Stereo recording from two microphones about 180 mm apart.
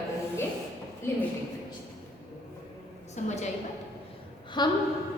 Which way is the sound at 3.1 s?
40° left (ahead or behind).